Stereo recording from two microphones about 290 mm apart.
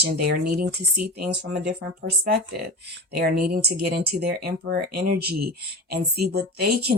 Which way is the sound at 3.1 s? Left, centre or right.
Right.